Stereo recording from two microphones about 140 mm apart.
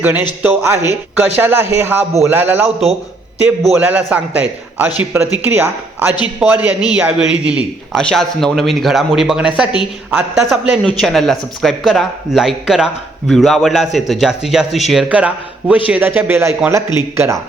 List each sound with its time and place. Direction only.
0.0 s speech: 15° right (ahead or behind)
3.4 s a man's voice: centre (ahead or behind)
3.8 s speech: 10° right (ahead or behind)
7.9 s a man's voice: 5° left (ahead or behind); by 17.4 s 20° right (ahead or behind)